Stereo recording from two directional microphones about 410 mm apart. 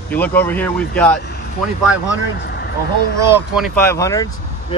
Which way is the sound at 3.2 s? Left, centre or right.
Centre.